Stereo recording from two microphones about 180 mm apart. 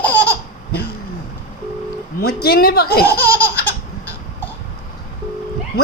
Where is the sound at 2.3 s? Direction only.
60° left (ahead or behind).